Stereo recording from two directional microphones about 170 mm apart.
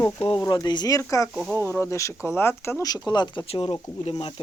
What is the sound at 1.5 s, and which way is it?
Speech, 15° left (ahead or behind).